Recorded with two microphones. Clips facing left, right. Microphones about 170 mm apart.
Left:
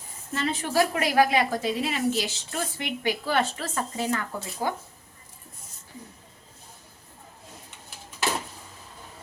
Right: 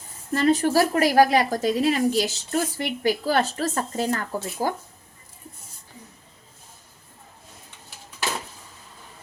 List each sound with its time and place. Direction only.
0.3 s a woman's voice: 40° right (ahead or behind)